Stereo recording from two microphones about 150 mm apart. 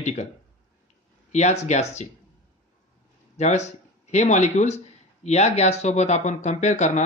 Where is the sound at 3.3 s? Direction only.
50° left (ahead or behind).